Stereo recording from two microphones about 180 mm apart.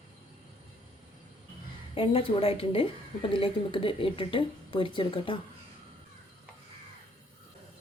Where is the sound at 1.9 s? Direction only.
30° left (ahead or behind).